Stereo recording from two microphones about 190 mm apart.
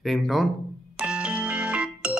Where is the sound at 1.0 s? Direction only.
5° right (ahead or behind).